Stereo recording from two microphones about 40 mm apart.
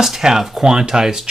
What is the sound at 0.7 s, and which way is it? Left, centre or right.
Speech, centre.